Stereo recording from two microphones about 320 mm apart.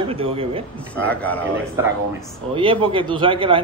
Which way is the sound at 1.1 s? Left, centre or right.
Centre.